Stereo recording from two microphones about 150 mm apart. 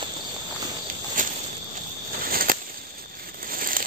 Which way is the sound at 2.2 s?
75° right (ahead or behind).